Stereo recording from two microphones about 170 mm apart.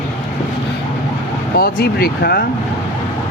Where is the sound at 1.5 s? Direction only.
60° left (ahead or behind).